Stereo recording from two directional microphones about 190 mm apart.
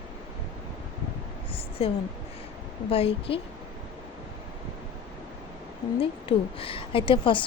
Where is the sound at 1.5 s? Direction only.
30° left (ahead or behind).